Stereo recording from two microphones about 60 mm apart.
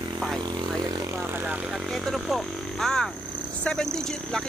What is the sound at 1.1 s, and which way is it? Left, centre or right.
Vehicle, right.